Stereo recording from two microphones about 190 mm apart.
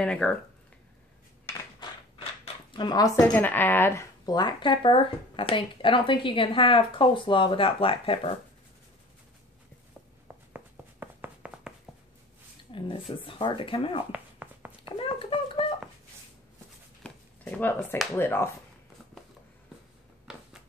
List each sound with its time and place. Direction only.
0.0 s speech: 5° left (ahead or behind)
1.8 s zipper: 25° left (ahead or behind)
3.3 s speech: 10° left (ahead or behind); by 8.2 s 30° left (ahead or behind)
10.2 s a sound: 10° right (ahead or behind)
12.7 s speech: 25° left (ahead or behind)
14.1 s a sound: 10° right (ahead or behind)
15.0 s speech: 30° left (ahead or behind)
17.0 s speech: 10° left (ahead or behind)